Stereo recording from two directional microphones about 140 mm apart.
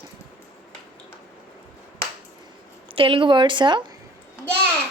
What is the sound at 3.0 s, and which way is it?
Speech, 40° right (ahead or behind).